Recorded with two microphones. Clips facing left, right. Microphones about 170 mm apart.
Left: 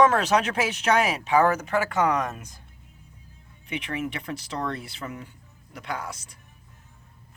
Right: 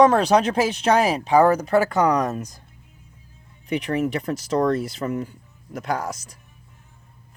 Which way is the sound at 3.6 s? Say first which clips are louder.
Right 8 dB; 40° right (ahead or behind).